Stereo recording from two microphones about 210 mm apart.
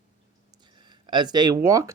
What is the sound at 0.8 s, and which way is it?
Speech, 20° right (ahead or behind).